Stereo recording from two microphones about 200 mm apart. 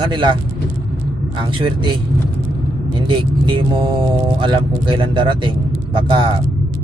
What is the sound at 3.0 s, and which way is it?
Speech, 25° right (ahead or behind).